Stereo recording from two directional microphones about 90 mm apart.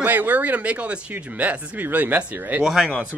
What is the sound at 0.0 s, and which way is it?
Speech, 20° right (ahead or behind).